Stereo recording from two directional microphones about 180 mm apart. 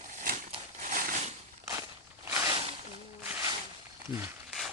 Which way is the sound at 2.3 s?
20° right (ahead or behind).